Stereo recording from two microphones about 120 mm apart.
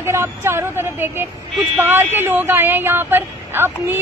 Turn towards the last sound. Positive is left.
turn(degrees=-20)  # may be behind; listen again after turning